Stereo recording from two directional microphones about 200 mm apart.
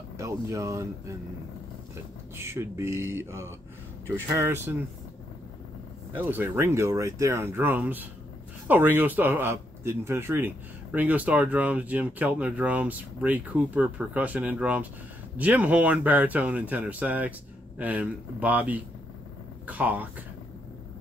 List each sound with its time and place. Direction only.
0.2 s speech: 15° right (ahead or behind)
2.3 s speech: 10° right (ahead or behind)
6.1 s speech: 10° right (ahead or behind)